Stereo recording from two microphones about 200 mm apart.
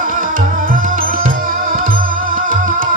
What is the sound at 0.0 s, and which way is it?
Music, 45° right (ahead or behind).